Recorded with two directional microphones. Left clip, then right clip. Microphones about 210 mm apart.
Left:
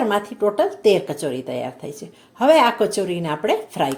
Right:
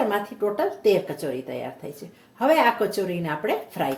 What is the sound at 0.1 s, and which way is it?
A woman's voice, 30° left (ahead or behind).